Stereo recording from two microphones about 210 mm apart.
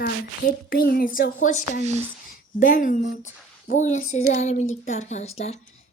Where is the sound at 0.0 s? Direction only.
45° left (ahead or behind).